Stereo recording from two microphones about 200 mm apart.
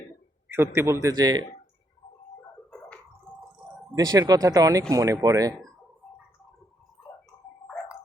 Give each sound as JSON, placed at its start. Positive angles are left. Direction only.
{"t": 0.5, "sound": "speech", "side_deg": -10}
{"t": 2.7, "sound": "organ", "side_deg": 5}
{"t": 3.9, "sound": "speech", "side_deg": -20}